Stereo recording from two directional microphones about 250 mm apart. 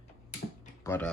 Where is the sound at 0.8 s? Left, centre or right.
Centre.